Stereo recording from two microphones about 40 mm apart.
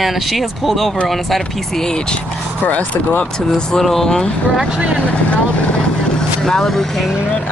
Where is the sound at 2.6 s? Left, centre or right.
Left.